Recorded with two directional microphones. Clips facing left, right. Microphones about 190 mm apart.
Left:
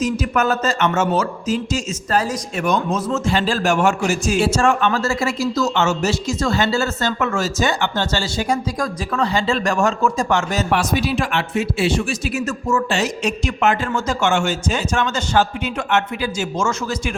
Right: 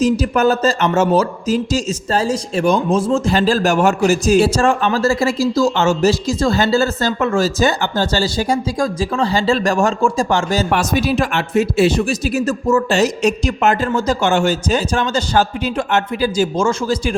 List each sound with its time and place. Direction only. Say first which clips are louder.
0.0 s a man's voice: right 5 dB; 35° right (ahead or behind)
10.7 s a man's voice: right 3 dB; 45° right (ahead or behind)